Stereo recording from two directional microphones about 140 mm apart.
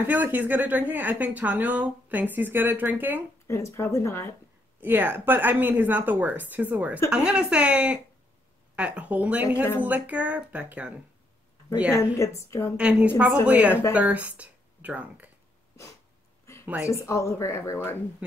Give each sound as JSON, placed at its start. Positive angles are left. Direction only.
{"t": 0.0, "sound": "speech", "side_deg": -15}
{"t": 3.4, "sound": "speech", "side_deg": 20}
{"t": 4.7, "sound": "speech", "side_deg": -15}
{"t": 11.9, "sound": "speech", "side_deg": 20}
{"t": 12.7, "sound": "speech", "side_deg": -10}
{"t": 16.6, "sound": "speech", "side_deg": -10}
{"t": 17.0, "sound": "speech", "side_deg": 20}